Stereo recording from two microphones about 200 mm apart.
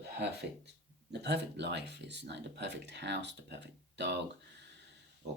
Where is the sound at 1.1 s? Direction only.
55° right (ahead or behind).